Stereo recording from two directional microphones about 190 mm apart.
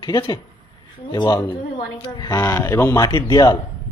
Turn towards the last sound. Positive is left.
turn(degrees=20)  # may be behind; listen again after turning